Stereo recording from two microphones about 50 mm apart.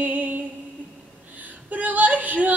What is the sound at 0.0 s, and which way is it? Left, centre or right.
Music, right.